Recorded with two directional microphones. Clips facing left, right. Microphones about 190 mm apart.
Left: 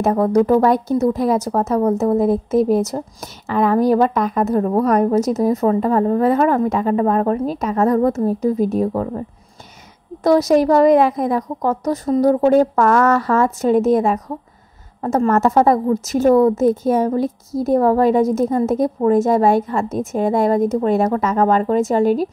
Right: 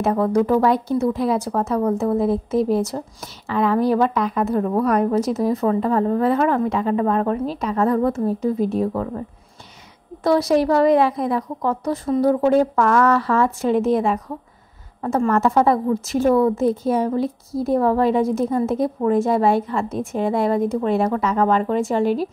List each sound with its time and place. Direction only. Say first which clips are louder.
0.0 s a woman's voice: left 3 dB; 40° left (ahead or behind)
10.2 s a woman's voice: left 3 dB; 40° left (ahead or behind)